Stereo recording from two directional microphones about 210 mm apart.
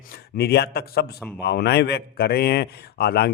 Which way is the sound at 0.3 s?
50° left (ahead or behind).